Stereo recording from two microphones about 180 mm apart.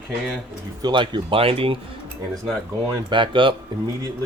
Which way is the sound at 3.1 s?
25° right (ahead or behind).